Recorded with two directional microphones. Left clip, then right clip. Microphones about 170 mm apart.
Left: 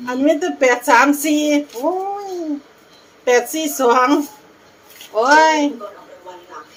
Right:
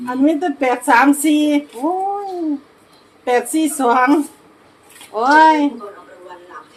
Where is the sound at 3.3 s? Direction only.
20° right (ahead or behind).